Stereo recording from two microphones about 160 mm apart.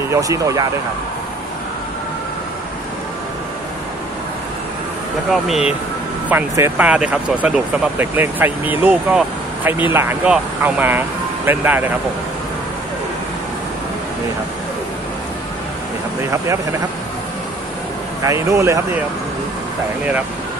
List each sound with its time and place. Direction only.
0.1 s speech: 20° right (ahead or behind)
6.2 s speech: 15° right (ahead or behind)
18.2 s speech: 20° right (ahead or behind)